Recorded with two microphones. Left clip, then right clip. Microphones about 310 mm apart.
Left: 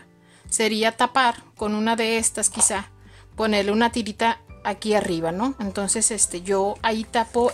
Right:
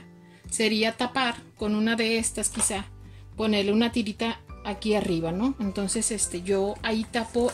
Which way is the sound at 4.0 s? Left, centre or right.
Left.